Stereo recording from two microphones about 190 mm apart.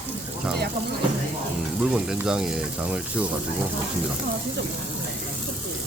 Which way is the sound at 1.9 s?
5° right (ahead or behind).